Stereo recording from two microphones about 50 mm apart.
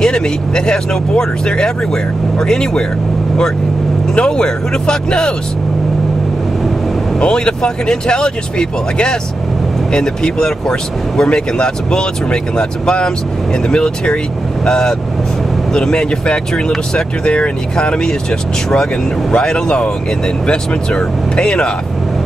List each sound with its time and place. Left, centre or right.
0.0 s speech: centre
4.1 s speech: centre
7.2 s speech: centre
19.3 s speech: centre